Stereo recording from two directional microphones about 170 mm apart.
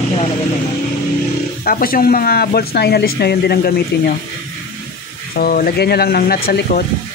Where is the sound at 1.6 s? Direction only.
60° left (ahead or behind).